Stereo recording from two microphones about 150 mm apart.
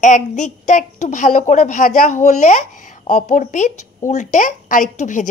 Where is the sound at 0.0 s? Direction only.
55° left (ahead or behind).